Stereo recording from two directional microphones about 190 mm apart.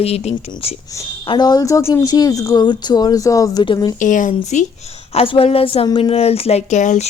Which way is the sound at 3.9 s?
45° left (ahead or behind).